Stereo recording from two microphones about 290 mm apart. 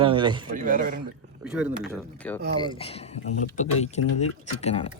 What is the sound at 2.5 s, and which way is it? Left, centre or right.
Speech, centre.